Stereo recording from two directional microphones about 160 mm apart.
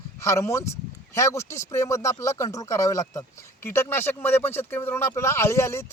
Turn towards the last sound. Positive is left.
turn(degrees=15)  # may be behind; listen again after turning